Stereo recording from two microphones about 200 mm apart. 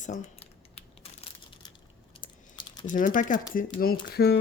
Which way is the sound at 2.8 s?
40° left (ahead or behind).